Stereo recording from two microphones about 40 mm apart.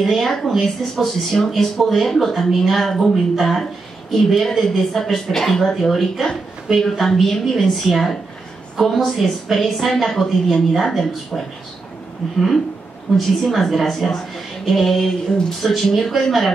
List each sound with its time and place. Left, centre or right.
0.0 s a woman's voice: centre